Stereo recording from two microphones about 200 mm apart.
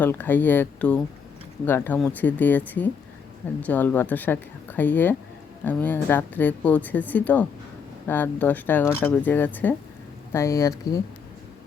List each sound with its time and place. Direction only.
0.0 s a woman's voice: 10° left (ahead or behind)